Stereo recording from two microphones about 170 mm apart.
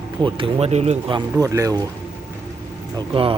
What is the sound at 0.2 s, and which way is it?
Speech, 30° right (ahead or behind).